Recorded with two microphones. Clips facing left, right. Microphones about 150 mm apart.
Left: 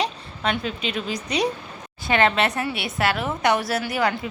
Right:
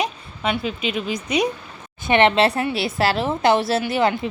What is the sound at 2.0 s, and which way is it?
A woman's voice, 25° right (ahead or behind).